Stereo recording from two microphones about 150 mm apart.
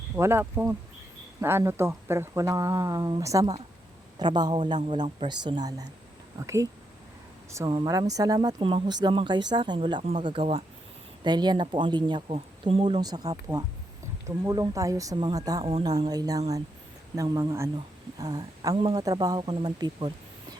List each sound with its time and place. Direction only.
0.2 s speech: 15° right (ahead or behind)
7.7 s speech: 25° right (ahead or behind)
15.6 s speech: 40° right (ahead or behind)
15.9 s speech: 25° right (ahead or behind)